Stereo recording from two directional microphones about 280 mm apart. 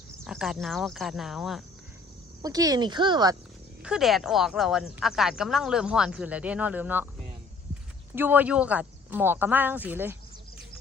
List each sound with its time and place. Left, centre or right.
0.3 s speech: centre
2.4 s speech: centre
3.8 s speech: centre
8.1 s speech: centre